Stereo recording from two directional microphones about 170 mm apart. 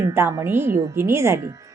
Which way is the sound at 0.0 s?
15° right (ahead or behind).